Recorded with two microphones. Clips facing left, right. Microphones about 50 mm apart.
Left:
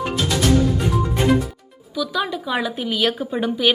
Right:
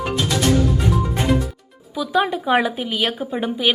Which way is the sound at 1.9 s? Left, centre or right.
Right.